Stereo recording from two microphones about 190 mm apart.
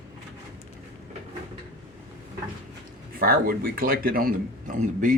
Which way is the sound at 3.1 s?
50° right (ahead or behind).